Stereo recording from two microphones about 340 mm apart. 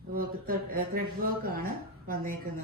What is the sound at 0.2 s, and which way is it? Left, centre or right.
Speech, right.